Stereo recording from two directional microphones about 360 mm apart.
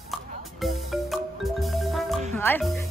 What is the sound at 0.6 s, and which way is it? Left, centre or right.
Music, centre.